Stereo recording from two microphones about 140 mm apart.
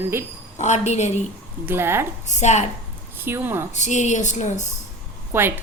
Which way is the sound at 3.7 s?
60° left (ahead or behind).